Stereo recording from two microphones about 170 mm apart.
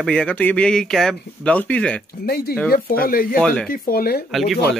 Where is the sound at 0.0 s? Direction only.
5° left (ahead or behind).